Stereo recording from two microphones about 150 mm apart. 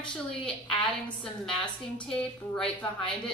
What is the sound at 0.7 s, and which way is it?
A woman's voice, 5° left (ahead or behind).